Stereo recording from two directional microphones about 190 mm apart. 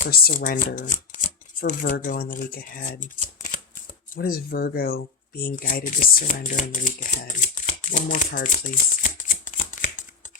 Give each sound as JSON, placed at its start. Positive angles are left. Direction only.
{"t": 0.0, "sound": "speech", "side_deg": 50}